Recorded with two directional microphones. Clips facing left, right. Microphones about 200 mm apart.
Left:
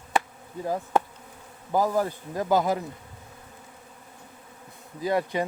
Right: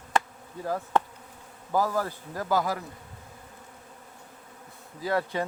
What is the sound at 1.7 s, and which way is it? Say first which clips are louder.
Speech: left 3 dB; 20° left (ahead or behind).